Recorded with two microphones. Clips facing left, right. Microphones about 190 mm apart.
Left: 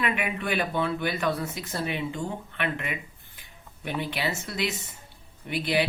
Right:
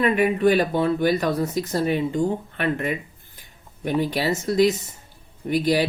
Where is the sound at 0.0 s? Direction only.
40° right (ahead or behind).